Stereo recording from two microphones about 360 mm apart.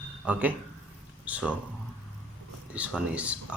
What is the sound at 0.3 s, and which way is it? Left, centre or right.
Speech, centre.